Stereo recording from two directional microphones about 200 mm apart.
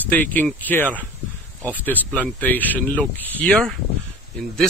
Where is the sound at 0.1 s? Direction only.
10° left (ahead or behind).